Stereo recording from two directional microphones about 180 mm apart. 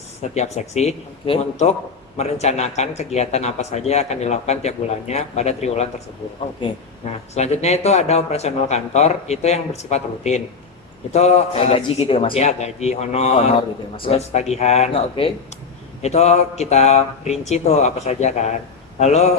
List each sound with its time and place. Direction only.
0.2 s a man's voice: 40° left (ahead or behind)